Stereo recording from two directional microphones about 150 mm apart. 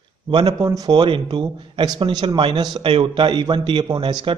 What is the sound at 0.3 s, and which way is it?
A man's voice, 30° right (ahead or behind).